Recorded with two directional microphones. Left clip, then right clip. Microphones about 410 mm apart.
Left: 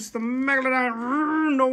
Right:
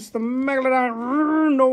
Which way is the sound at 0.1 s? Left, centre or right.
Centre.